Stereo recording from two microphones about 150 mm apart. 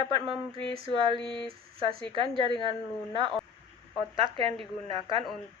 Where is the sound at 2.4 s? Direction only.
35° right (ahead or behind).